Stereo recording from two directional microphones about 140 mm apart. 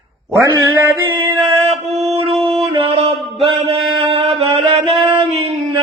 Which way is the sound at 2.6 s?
45° right (ahead or behind).